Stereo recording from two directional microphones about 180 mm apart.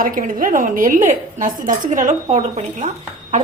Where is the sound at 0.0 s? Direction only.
50° right (ahead or behind).